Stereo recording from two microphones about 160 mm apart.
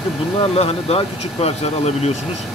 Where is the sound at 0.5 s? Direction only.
40° left (ahead or behind).